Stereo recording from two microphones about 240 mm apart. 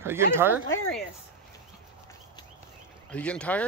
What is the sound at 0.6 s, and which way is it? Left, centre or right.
Speech, left.